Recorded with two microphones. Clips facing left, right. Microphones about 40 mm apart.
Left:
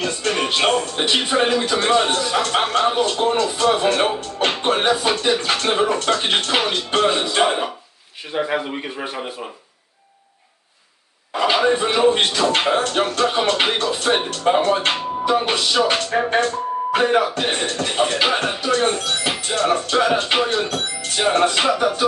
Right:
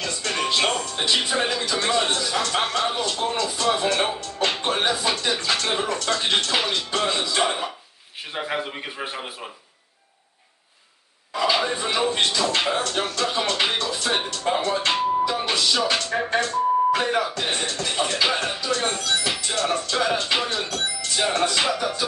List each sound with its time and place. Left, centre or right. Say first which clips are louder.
0.0 s speech: left 5 dB; left
8.4 s speech: left 6 dB; centre
11.3 s speech: left 5 dB; left